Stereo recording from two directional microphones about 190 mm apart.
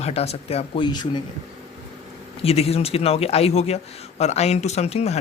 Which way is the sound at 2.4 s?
30° left (ahead or behind).